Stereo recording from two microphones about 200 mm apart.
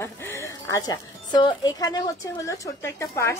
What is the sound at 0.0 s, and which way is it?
A woman's voice, 15° left (ahead or behind).